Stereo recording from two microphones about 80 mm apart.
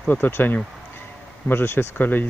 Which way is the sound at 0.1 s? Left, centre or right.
Left.